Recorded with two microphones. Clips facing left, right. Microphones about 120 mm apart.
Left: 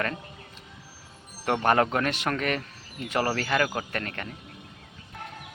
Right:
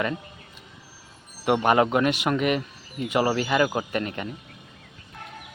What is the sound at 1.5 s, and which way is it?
Speech, 10° right (ahead or behind).